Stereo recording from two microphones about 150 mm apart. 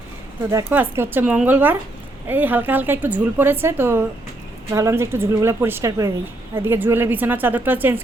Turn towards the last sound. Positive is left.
turn(degrees=-15)  # may be behind; listen again after turning